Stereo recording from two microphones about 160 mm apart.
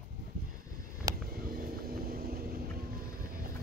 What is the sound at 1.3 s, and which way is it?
Vehicle, 65° right (ahead or behind).